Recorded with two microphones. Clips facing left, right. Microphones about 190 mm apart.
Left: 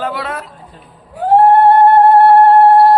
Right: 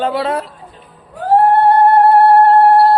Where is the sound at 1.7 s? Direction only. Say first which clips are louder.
Left 2 dB; 20° left (ahead or behind).